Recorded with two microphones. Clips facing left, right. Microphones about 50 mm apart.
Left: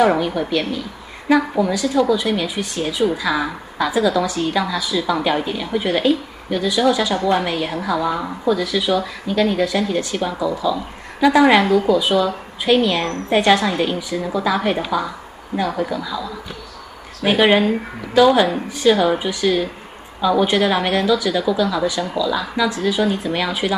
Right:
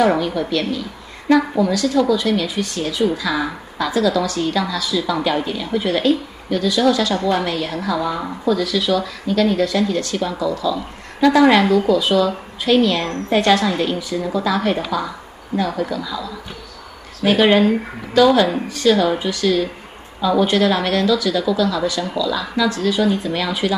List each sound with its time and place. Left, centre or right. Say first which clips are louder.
0.0 s a woman's voice: even; centre